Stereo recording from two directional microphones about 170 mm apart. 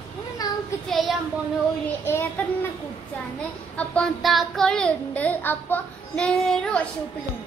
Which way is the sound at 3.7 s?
5° left (ahead or behind).